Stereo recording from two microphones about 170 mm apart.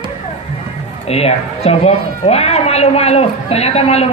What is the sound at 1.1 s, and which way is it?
A woman's voice, 35° left (ahead or behind).